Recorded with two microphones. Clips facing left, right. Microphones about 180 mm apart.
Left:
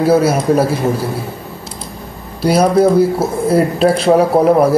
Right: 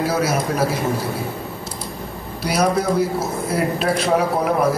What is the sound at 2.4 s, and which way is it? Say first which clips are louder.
A man's voice: left 8 dB; 30° left (ahead or behind).